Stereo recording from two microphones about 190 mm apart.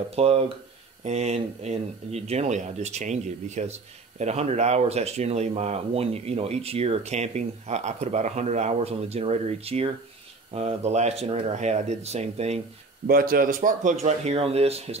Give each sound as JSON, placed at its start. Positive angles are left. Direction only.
{"t": 0.1, "sound": "speech", "side_deg": -30}
{"t": 13.0, "sound": "speech", "side_deg": -50}